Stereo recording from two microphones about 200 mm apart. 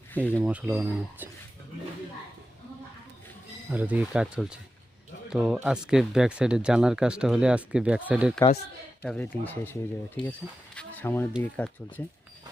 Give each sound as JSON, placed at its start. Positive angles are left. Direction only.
{"t": 0.1, "sound": "speech", "side_deg": 10}
{"t": 0.3, "sound": "speech", "side_deg": -10}
{"t": 3.7, "sound": "speech", "side_deg": -10}
{"t": 9.0, "sound": "speech", "side_deg": 5}
{"t": 10.2, "sound": "speech", "side_deg": 25}
{"t": 10.8, "sound": "a sound", "side_deg": 10}
{"t": 11.5, "sound": "speech", "side_deg": 5}